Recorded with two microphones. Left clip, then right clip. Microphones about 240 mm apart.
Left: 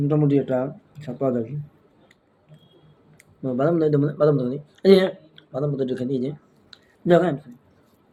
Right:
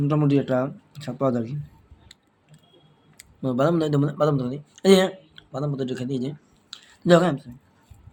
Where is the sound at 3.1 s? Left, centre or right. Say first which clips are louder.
Right 1 dB; right.